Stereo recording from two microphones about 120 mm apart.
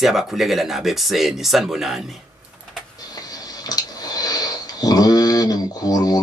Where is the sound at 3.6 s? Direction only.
30° left (ahead or behind).